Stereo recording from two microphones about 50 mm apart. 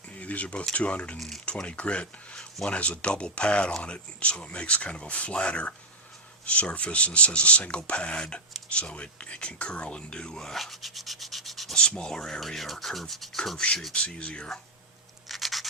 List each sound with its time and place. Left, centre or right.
0.1 s a sound: left
0.7 s speech: left; by 11.7 s centre
11.7 s speech: centre
13.9 s speech: left
15.3 s scratch: centre